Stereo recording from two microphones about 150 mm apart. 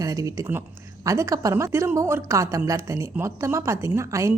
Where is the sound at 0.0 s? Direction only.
20° right (ahead or behind).